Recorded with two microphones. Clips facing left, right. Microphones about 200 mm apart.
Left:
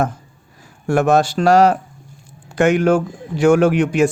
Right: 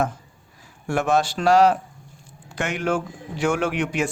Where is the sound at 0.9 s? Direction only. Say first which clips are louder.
Left 6 dB; 45° left (ahead or behind).